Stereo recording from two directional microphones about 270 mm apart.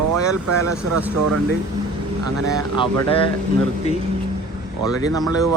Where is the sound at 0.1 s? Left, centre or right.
Right.